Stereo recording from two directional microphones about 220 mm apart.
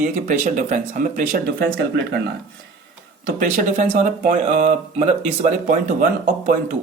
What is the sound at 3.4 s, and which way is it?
Speech, 35° right (ahead or behind).